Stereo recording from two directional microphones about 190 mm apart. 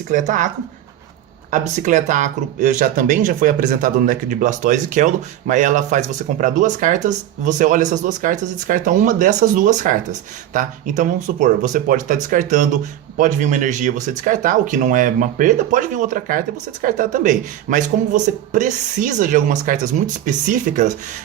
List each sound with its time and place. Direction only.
0.1 s speech: 40° right (ahead or behind)
1.5 s speech: 40° right (ahead or behind)